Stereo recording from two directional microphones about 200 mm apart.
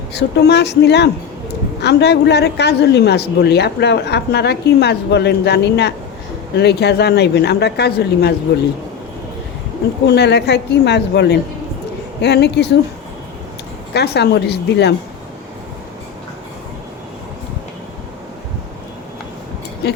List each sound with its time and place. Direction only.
0.1 s speech: 55° left (ahead or behind)
10.1 s speech: 55° left (ahead or behind)
13.9 s speech: 55° left (ahead or behind)